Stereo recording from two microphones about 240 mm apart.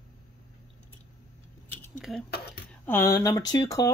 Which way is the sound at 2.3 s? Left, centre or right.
Left.